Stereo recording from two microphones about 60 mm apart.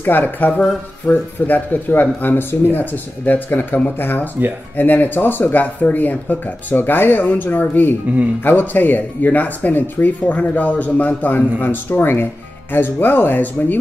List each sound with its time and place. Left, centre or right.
0.0 s speech: left